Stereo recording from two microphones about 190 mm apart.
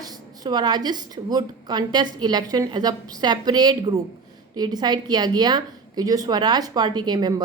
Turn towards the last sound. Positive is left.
turn(degrees=-20)  # may be behind; listen again after turning